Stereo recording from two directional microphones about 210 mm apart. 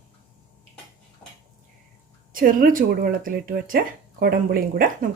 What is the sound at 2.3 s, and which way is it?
Speech, 40° right (ahead or behind).